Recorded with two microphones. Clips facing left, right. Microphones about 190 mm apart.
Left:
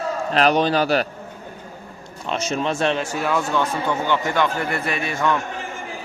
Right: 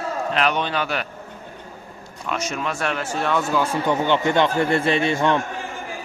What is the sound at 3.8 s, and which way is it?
Speech, 20° right (ahead or behind).